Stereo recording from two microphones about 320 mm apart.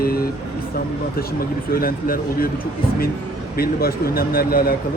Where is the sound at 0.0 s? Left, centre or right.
Left.